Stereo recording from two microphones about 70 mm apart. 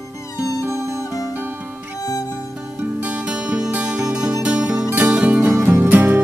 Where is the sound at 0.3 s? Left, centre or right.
Left.